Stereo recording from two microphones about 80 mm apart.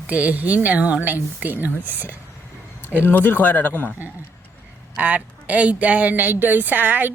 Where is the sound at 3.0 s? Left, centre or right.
Left.